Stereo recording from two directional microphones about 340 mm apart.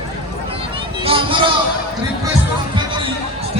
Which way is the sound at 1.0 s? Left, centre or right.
Centre.